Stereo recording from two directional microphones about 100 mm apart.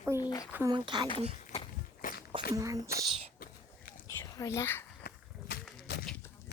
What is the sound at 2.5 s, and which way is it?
Speech, 35° right (ahead or behind).